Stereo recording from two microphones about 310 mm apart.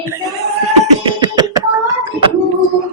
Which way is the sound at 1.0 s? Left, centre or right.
Centre.